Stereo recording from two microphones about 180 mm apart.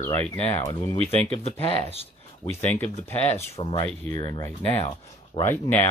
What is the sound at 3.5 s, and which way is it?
Speech, 35° left (ahead or behind).